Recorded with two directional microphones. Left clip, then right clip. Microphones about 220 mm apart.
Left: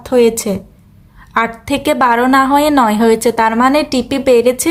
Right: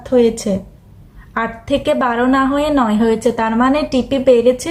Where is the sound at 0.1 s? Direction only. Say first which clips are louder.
Left 2 dB; 45° left (ahead or behind).